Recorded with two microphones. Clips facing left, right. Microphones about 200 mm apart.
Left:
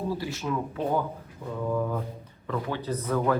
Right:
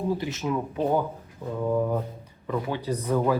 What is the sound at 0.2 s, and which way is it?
Speech, 20° right (ahead or behind).